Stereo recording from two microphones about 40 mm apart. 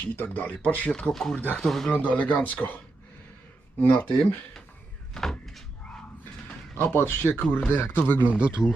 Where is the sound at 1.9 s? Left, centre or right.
Left.